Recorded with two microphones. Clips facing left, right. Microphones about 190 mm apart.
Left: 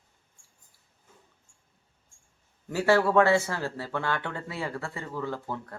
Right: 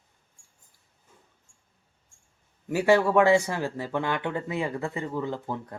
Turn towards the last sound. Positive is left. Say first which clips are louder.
# right 2 dB
turn(degrees=-20)  # may be behind; listen again after turning